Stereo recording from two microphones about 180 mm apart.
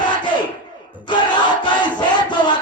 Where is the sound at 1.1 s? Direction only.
25° left (ahead or behind).